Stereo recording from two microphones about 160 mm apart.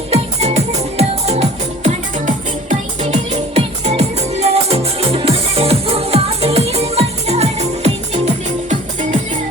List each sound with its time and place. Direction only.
0.1 s music: 40° right (ahead or behind)